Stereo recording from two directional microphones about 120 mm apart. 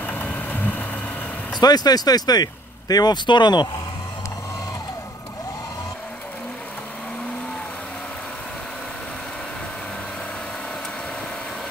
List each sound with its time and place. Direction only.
0.0 s vehicle: 15° left (ahead or behind)
1.5 s speech: 35° left (ahead or behind)